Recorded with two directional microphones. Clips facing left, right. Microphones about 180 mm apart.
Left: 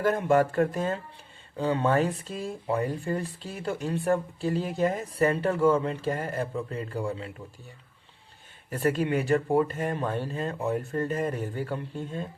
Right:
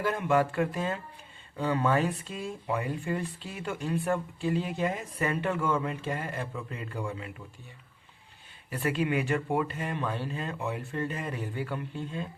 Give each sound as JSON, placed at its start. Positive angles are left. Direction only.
{"t": 0.0, "sound": "speech", "side_deg": 45}
{"t": 8.7, "sound": "speech", "side_deg": 45}